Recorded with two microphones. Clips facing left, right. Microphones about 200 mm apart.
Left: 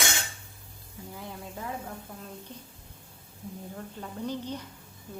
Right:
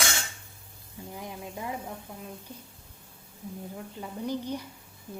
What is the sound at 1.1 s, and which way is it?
Speech, 15° right (ahead or behind).